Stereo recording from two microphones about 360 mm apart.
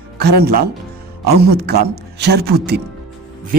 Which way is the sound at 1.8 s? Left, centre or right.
Right.